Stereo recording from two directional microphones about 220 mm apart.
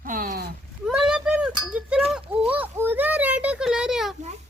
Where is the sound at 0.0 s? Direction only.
40° right (ahead or behind).